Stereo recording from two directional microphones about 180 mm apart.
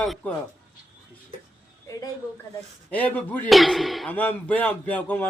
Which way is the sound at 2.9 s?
10° left (ahead or behind).